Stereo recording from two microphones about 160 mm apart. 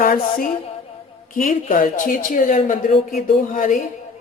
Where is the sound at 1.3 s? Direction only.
55° left (ahead or behind).